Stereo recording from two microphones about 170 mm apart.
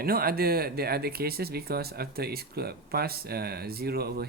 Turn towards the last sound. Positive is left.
turn(degrees=-65)  # may be behind; listen again after turning